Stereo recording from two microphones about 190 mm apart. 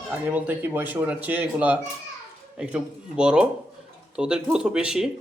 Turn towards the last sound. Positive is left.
turn(degrees=-5)  # may be behind; listen again after turning